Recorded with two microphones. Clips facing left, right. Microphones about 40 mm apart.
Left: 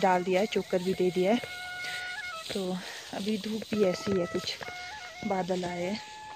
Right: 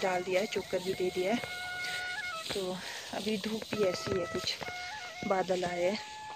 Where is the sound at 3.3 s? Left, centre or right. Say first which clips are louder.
Left 2 dB; centre.